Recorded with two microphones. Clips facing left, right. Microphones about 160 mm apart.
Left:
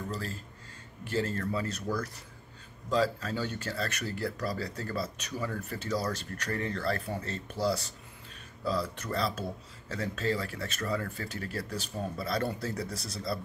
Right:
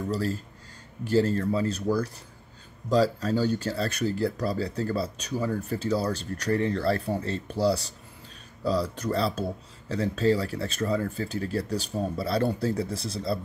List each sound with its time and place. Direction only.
0.1 s speech: 40° right (ahead or behind)